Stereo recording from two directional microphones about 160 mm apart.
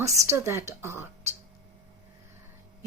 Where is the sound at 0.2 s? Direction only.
15° right (ahead or behind).